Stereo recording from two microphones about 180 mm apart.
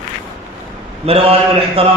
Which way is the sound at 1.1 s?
35° right (ahead or behind).